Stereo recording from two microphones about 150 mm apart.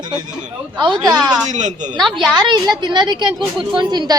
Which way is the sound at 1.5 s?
55° right (ahead or behind).